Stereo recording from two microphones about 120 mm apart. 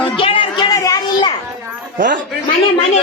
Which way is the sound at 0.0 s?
45° left (ahead or behind).